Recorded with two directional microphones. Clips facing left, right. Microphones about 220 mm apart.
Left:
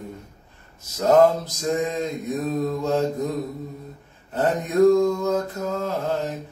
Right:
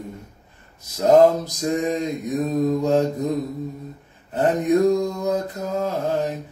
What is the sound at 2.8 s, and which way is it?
Mantra, 15° right (ahead or behind).